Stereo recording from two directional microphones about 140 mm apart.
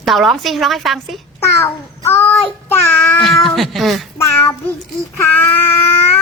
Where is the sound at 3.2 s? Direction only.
Centre (ahead or behind).